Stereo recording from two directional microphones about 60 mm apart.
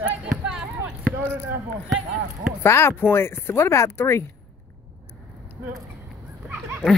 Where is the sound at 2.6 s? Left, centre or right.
Left.